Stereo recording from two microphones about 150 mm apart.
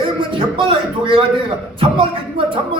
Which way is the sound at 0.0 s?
35° right (ahead or behind).